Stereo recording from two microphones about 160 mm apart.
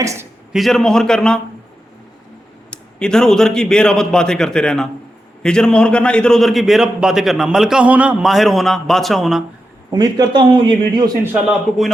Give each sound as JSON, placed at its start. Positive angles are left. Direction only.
{"t": 0.0, "sound": "a man's voice", "side_deg": -20}
{"t": 0.5, "sound": "a man's voice", "side_deg": 0}
{"t": 2.6, "sound": "a man's voice", "side_deg": 5}
{"t": 9.9, "sound": "a man's voice", "side_deg": -25}